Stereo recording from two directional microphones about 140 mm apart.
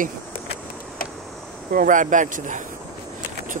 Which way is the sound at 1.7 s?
75° right (ahead or behind).